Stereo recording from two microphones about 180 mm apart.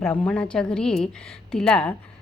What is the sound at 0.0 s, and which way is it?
A woman's voice, 10° left (ahead or behind).